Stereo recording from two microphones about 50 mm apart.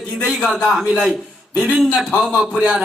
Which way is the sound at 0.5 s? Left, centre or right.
Centre.